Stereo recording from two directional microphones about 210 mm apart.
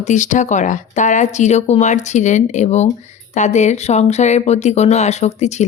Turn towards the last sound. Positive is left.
turn(degrees=35)  # may be behind; listen again after turning